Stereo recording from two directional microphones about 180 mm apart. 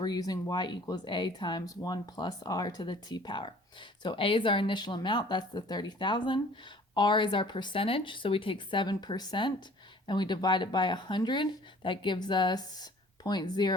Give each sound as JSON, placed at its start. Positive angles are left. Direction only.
{"t": 0.0, "sound": "speech", "side_deg": 20}